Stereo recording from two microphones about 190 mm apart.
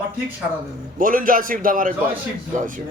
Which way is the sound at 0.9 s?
45° right (ahead or behind).